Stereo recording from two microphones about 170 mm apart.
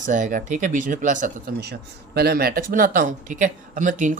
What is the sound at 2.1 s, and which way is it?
Speech, 65° right (ahead or behind).